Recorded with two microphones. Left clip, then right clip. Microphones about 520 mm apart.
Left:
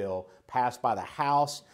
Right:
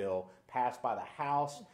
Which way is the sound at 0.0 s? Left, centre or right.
Left.